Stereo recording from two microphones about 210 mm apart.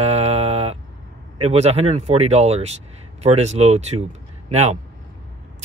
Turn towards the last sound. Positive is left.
turn(degrees=-30)  # may be behind; listen again after turning